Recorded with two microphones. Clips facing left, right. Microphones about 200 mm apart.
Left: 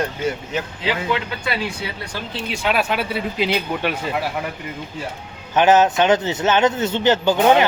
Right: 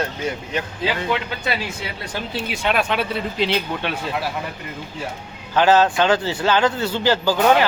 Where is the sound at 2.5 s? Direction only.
Centre (ahead or behind).